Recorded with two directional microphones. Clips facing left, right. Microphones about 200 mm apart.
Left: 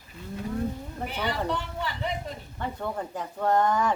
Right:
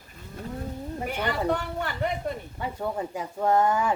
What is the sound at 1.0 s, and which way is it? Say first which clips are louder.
Speech: right 2 dB; 50° right (ahead or behind).